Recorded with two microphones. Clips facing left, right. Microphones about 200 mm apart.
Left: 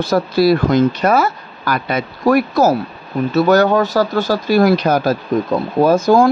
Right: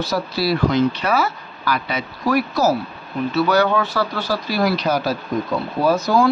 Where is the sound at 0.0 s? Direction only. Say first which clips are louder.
Left 8 dB; 50° left (ahead or behind).